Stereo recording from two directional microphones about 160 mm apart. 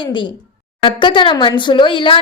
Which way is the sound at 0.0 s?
30° left (ahead or behind).